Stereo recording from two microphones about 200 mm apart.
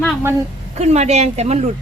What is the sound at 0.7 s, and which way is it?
Speech, 35° right (ahead or behind).